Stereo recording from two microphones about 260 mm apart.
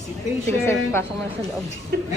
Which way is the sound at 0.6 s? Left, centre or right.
Centre.